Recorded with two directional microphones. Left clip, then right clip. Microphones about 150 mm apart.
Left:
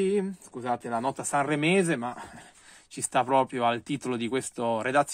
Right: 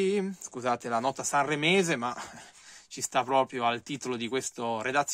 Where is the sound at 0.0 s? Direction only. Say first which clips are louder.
Left 2 dB; 20° right (ahead or behind).